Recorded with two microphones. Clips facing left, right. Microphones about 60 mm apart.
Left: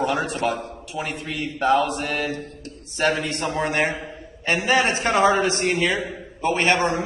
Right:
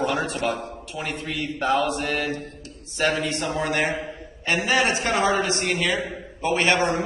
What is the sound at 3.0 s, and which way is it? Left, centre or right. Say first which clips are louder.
A man's voice: left 1 dB; left.